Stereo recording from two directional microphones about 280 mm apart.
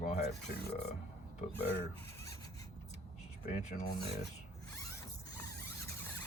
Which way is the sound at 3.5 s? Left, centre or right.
Left.